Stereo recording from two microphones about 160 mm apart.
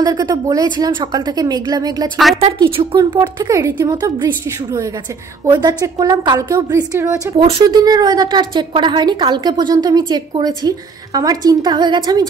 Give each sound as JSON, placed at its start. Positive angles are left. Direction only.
{"t": 0.0, "sound": "a woman's voice", "side_deg": -25}
{"t": 7.3, "sound": "speech", "side_deg": -35}
{"t": 7.6, "sound": "a woman's voice", "side_deg": -25}